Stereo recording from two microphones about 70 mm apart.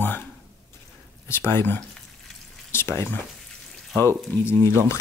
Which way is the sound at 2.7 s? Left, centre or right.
Left.